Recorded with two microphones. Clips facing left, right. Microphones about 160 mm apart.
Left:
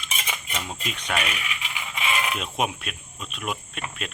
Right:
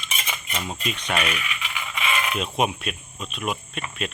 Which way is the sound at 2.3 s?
Centre (ahead or behind).